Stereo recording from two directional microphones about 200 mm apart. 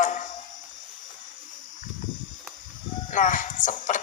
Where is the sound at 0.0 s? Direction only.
40° left (ahead or behind).